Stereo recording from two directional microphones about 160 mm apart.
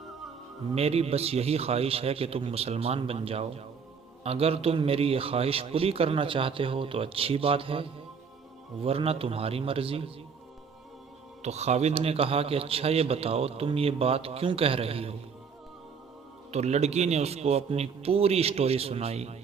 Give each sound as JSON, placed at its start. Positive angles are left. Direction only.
{"t": 0.8, "sound": "a man's voice", "side_deg": -40}
{"t": 11.4, "sound": "a man's voice", "side_deg": -45}
{"t": 16.5, "sound": "a man's voice", "side_deg": -45}